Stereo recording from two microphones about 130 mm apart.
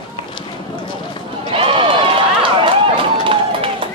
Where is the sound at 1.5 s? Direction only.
45° right (ahead or behind).